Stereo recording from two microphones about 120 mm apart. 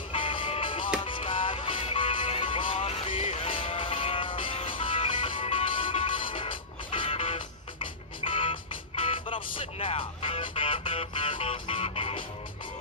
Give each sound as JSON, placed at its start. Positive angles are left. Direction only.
{"t": 0.1, "sound": "music", "side_deg": 50}